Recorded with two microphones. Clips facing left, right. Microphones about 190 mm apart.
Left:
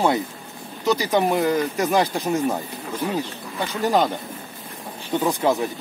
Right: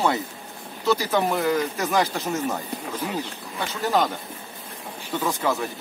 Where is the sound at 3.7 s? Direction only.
15° left (ahead or behind).